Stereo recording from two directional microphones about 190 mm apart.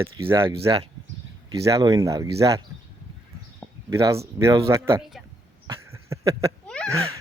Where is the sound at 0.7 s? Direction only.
20° right (ahead or behind).